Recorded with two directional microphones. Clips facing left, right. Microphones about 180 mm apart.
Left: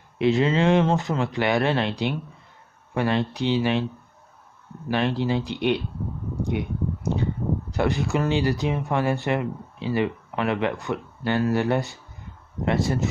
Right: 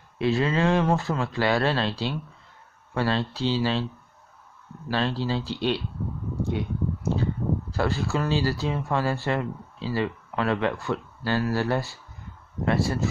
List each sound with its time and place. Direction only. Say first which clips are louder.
0.2 s speech: left 3 dB; 20° left (ahead or behind)
4.8 s speech: left 3 dB; 20° left (ahead or behind)
6.4 s a sound: left 1 dB; 20° left (ahead or behind)
7.7 s speech: left 4 dB; 20° left (ahead or behind)